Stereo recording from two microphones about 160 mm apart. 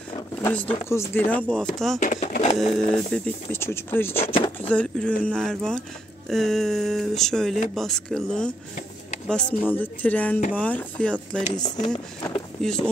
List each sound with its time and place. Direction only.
0.4 s speech: 10° left (ahead or behind)
2.0 s speech: 50° left (ahead or behind)
2.6 s speech: 5° left (ahead or behind)
4.2 s speech: 35° left (ahead or behind)
4.6 s speech: 10° left (ahead or behind)
11.5 s speech: 25° left (ahead or behind)
12.6 s speech: 5° left (ahead or behind)